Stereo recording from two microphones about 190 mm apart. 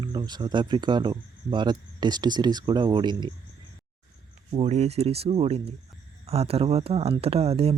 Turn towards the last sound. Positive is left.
turn(degrees=-30)  # may be behind; listen again after turning